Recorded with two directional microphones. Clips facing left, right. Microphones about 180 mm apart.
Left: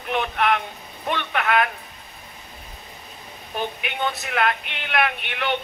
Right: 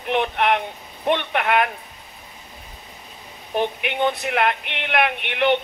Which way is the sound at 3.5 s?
20° right (ahead or behind).